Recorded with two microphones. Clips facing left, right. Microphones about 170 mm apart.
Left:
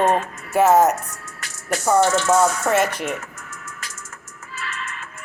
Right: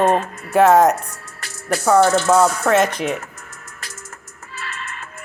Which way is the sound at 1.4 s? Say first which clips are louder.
Right 3 dB; 35° right (ahead or behind).